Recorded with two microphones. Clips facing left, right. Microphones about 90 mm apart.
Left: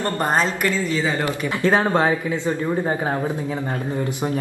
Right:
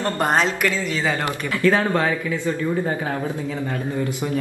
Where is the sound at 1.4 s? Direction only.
20° left (ahead or behind).